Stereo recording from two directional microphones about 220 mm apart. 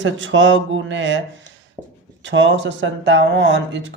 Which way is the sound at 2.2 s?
55° right (ahead or behind).